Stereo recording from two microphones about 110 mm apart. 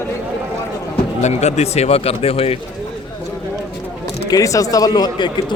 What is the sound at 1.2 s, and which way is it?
Speech, 90° left.